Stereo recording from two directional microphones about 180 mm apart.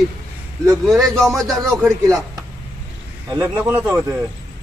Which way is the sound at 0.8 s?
Centre (ahead or behind).